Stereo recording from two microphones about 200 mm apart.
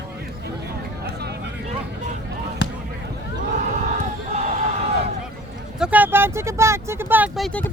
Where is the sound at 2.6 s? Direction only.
65° left (ahead or behind).